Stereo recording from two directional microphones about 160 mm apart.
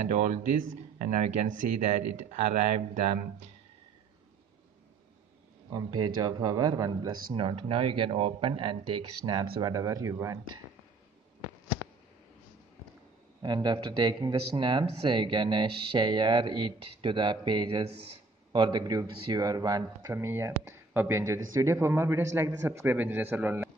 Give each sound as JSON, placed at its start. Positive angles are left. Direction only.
{"t": 0.1, "sound": "speech", "side_deg": -45}
{"t": 5.7, "sound": "speech", "side_deg": -25}
{"t": 13.4, "sound": "a man's voice", "side_deg": -25}